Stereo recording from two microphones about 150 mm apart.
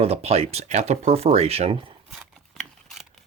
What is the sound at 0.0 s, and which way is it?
Speech, 45° right (ahead or behind).